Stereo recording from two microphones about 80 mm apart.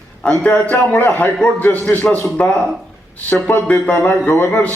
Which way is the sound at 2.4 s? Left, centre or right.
Centre.